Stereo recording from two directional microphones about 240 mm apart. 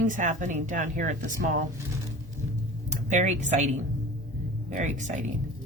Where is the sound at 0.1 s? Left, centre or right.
Right.